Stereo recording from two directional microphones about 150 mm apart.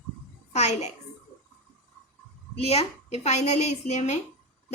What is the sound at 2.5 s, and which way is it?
A woman's voice, 40° left (ahead or behind).